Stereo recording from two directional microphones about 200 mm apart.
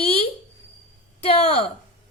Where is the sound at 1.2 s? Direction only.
30° left (ahead or behind).